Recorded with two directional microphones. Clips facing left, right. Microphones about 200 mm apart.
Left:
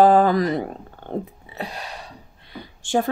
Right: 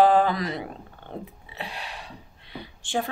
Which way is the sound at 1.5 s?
40° left (ahead or behind).